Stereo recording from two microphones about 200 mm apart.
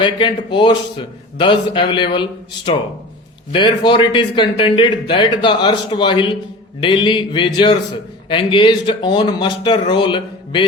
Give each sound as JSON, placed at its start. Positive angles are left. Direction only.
{"t": 0.0, "sound": "speech", "side_deg": 25}